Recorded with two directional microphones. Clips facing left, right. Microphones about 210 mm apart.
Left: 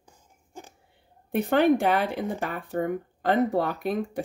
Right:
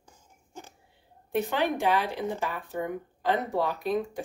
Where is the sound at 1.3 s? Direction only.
55° left (ahead or behind).